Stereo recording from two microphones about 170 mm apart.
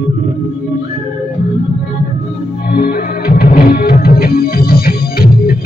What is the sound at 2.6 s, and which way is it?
Music, 60° left (ahead or behind).